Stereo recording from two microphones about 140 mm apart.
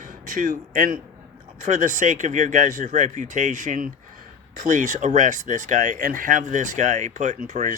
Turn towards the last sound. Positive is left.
turn(degrees=-65)  # may be behind; listen again after turning